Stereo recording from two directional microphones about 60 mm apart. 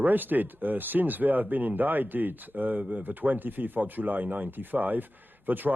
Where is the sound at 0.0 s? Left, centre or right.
Right.